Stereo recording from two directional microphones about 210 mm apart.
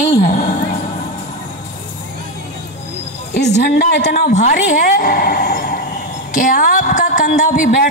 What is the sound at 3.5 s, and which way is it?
Speech, 55° left (ahead or behind).